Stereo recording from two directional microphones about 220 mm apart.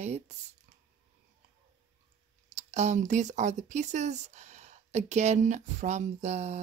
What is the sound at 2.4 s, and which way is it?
Speech, 30° right (ahead or behind).